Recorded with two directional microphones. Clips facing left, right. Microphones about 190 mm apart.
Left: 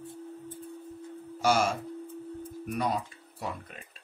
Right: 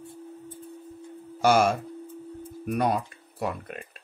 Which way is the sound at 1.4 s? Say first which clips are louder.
Right 5 dB; 60° right (ahead or behind).